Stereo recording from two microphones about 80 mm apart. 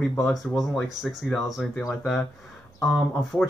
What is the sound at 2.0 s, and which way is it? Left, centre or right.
Speech, centre.